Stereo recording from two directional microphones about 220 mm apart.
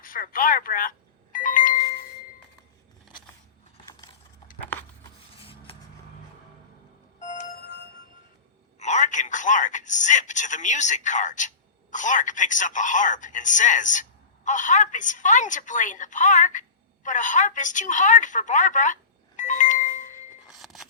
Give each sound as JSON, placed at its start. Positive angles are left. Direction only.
{"t": 0.0, "sound": "telephone", "side_deg": 40}
{"t": 5.4, "sound": "a sound", "side_deg": 25}
{"t": 7.2, "sound": "music", "side_deg": 35}
{"t": 8.8, "sound": "speech", "side_deg": 30}
{"t": 19.4, "sound": "music", "side_deg": 35}
{"t": 20.5, "sound": "music", "side_deg": 0}